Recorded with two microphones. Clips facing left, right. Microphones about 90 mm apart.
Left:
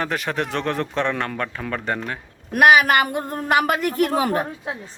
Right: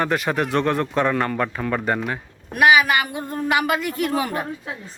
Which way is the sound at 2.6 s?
50° left (ahead or behind).